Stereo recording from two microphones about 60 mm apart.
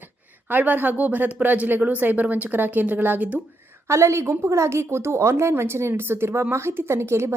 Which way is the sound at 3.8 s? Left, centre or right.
Right.